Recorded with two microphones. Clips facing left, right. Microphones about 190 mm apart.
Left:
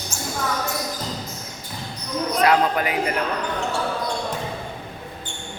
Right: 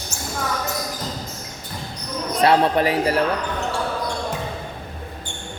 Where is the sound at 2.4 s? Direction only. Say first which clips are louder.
Right 3 dB; 30° right (ahead or behind).